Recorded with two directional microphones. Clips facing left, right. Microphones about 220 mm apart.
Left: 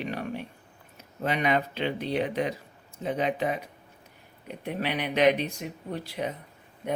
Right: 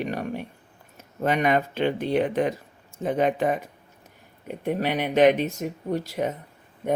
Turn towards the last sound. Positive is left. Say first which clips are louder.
# right 6 dB
turn(degrees=-45)  # may be behind; listen again after turning